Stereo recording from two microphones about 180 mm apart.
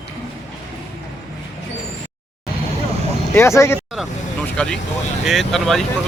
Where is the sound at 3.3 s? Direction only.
15° left (ahead or behind).